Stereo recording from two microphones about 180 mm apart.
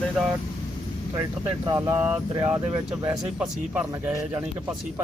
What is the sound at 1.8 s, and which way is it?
Speech, 15° right (ahead or behind).